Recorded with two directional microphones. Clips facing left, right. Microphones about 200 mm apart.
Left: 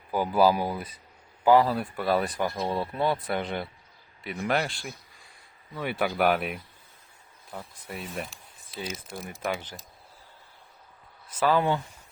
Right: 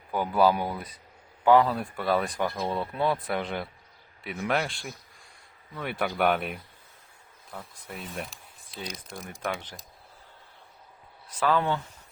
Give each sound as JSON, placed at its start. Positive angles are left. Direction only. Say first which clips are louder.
{"t": 0.1, "sound": "speech", "louder": "left 1 dB", "side_deg": 5}
{"t": 11.3, "sound": "speech", "louder": "left 2 dB", "side_deg": 10}